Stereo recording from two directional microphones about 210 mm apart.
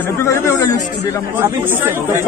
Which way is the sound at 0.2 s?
15° left (ahead or behind).